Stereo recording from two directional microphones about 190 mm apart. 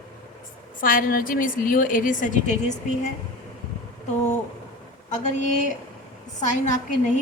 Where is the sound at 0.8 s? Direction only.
45° left (ahead or behind).